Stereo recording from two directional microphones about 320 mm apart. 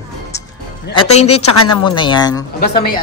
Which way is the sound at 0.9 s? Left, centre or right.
Centre.